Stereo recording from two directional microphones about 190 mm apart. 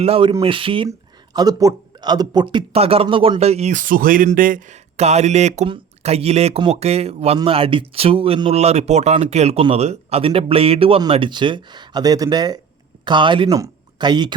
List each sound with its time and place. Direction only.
0.0 s speech: 30° right (ahead or behind)